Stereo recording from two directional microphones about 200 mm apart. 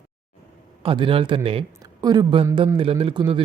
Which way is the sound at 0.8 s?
25° right (ahead or behind).